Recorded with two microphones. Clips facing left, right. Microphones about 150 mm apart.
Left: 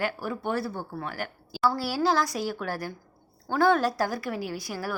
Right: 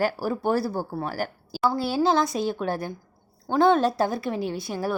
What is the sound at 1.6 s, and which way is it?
A woman's voice, 20° right (ahead or behind).